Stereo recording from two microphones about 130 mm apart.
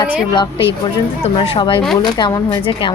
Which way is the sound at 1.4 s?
40° left (ahead or behind).